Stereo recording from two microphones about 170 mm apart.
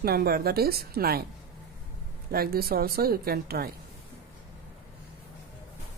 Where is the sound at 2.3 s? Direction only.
65° right (ahead or behind).